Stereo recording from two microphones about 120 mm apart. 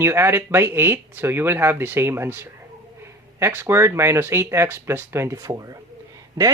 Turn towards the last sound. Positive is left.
turn(degrees=-30)  # may be behind; listen again after turning